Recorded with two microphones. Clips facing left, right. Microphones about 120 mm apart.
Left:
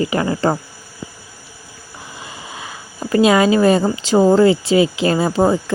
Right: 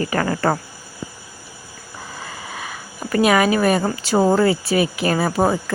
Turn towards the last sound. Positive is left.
turn(degrees=25)  # may be behind; listen again after turning